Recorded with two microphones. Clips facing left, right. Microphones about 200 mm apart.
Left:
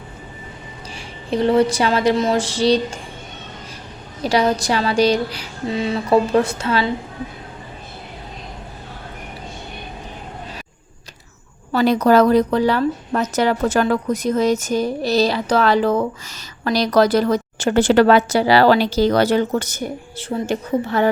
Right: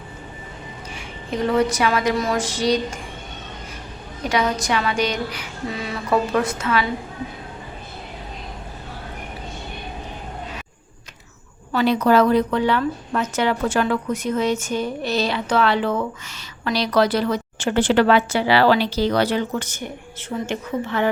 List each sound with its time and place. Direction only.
0.9 s a woman's voice: 30° left (ahead or behind)
4.2 s a woman's voice: 30° left (ahead or behind)
11.7 s a woman's voice: 40° left (ahead or behind)